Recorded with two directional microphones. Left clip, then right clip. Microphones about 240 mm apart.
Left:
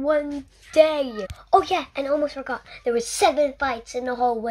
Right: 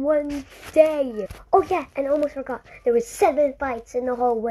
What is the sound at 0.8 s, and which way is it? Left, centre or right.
A woman's voice, left.